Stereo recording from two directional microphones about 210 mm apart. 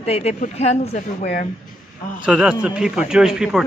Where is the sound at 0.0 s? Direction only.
30° left (ahead or behind).